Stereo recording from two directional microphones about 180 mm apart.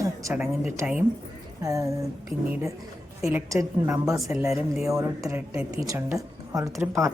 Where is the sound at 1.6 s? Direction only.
20° right (ahead or behind).